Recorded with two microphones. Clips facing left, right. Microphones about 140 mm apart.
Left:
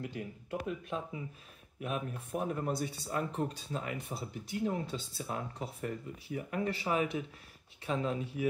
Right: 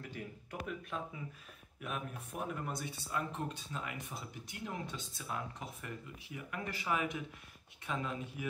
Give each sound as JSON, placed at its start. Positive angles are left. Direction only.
{"t": 0.0, "sound": "speech", "side_deg": 20}